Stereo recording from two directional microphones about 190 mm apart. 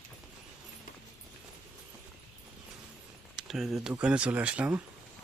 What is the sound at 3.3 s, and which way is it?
Speech, centre (ahead or behind).